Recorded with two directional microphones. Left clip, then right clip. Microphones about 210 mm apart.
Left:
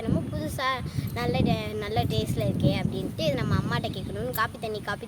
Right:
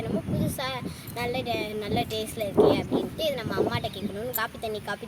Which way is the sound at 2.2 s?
5° left (ahead or behind).